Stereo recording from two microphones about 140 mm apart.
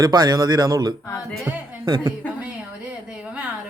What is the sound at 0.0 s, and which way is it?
Speech, 30° right (ahead or behind).